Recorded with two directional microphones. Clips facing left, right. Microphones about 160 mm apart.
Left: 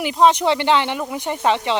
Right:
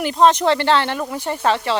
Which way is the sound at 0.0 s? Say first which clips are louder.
Right 1 dB; 10° left (ahead or behind).